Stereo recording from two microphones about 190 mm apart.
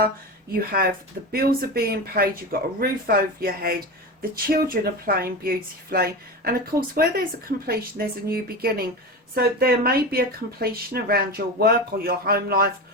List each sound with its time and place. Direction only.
0.5 s speech: 50° right (ahead or behind)